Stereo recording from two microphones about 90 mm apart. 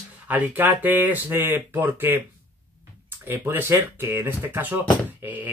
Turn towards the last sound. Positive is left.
turn(degrees=-20)  # may be behind; listen again after turning